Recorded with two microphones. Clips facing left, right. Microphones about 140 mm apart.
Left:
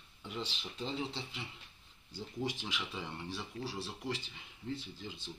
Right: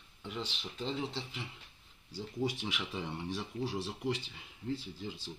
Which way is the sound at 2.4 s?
10° right (ahead or behind).